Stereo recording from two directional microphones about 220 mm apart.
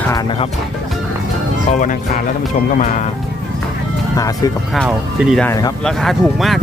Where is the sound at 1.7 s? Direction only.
35° left (ahead or behind).